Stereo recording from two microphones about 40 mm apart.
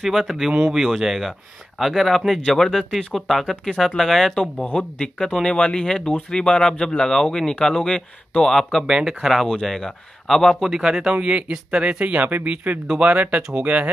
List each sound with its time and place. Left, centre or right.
0.0 s speech: centre
4.7 s speech: left
8.8 s speech: centre
9.7 s speech: centre
10.6 s speech: centre
10.9 s speech: centre
11.1 s speech: right
13.4 s speech: centre